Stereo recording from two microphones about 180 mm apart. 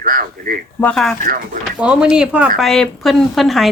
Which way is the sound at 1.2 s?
50° right (ahead or behind).